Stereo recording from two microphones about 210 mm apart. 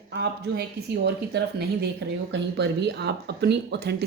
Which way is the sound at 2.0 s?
60° right (ahead or behind).